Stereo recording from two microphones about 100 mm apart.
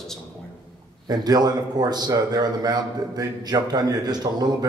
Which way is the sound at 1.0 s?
45° right (ahead or behind).